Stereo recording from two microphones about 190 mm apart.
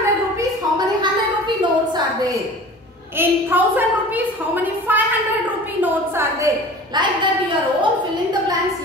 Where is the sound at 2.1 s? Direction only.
15° right (ahead or behind).